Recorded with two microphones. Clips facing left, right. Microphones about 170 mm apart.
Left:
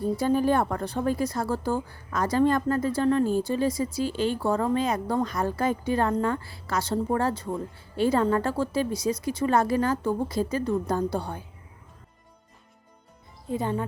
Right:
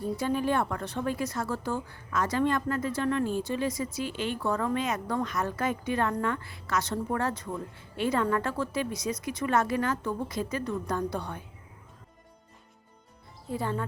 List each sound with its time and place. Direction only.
0.2 s a woman's voice: 40° left (ahead or behind)
13.5 s speech: 20° left (ahead or behind)